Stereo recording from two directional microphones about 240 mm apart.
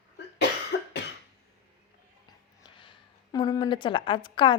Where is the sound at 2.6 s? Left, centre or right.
Centre.